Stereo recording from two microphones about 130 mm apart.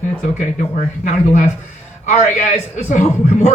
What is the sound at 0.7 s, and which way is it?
A man's voice, 70° left (ahead or behind).